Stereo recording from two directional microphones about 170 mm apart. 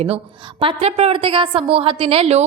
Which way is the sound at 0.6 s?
35° right (ahead or behind).